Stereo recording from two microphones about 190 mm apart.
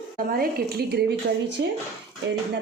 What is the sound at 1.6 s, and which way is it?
Speech, 70° right (ahead or behind).